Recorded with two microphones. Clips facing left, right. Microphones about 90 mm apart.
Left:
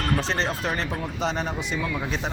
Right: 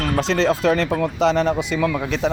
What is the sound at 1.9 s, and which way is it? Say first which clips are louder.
Speech: right 7 dB; 80° right.